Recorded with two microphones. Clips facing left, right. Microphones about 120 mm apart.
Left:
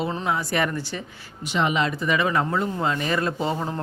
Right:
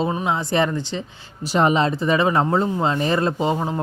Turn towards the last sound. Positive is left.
turn(degrees=-20)  # may be behind; listen again after turning